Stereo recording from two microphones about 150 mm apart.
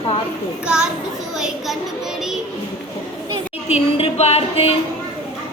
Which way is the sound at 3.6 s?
45° left (ahead or behind).